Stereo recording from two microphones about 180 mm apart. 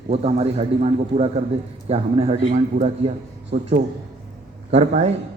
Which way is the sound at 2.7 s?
50° right (ahead or behind).